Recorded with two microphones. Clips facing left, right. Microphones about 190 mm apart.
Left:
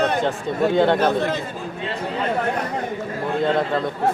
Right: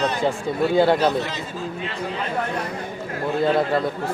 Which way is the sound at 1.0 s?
55° left (ahead or behind).